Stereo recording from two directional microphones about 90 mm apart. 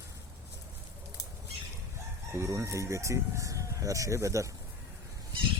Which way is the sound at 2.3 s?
35° right (ahead or behind).